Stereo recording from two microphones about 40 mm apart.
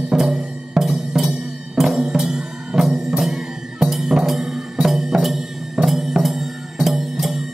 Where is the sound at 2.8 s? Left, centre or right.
Centre.